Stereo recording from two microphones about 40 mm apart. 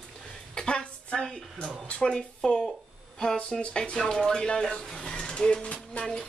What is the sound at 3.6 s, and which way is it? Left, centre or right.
Speech, left.